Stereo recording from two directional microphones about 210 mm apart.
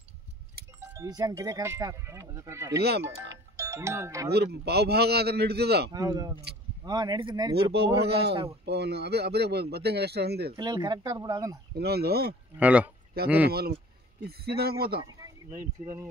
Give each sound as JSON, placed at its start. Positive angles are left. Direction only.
{"t": 0.9, "sound": "speech", "side_deg": -15}
{"t": 2.8, "sound": "speech", "side_deg": -50}
{"t": 3.5, "sound": "speech", "side_deg": -15}
{"t": 4.3, "sound": "speech", "side_deg": -50}
{"t": 5.9, "sound": "speech", "side_deg": -20}
{"t": 8.0, "sound": "speech", "side_deg": -55}
{"t": 10.5, "sound": "speech", "side_deg": -20}
{"t": 11.7, "sound": "speech", "side_deg": -50}
{"t": 12.5, "sound": "speech", "side_deg": -5}
{"t": 13.2, "sound": "speech", "side_deg": -50}
{"t": 15.0, "sound": "a sound", "side_deg": -15}